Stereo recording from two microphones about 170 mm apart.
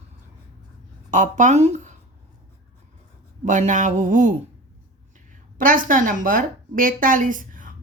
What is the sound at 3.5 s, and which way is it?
Speech, 45° right (ahead or behind).